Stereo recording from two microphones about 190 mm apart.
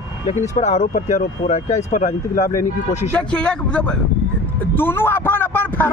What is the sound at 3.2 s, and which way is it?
A man's voice, 5° left (ahead or behind).